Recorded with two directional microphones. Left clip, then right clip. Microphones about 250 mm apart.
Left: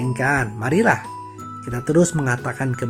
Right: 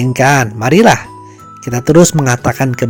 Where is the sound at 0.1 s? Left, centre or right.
Right.